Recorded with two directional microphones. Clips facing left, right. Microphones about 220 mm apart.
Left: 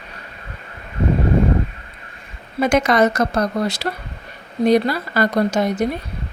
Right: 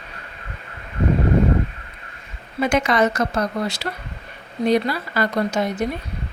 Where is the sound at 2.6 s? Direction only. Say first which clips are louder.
Left 3 dB; 40° left (ahead or behind).